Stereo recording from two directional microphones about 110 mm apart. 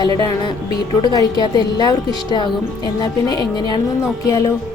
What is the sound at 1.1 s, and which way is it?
Speech, 40° left (ahead or behind).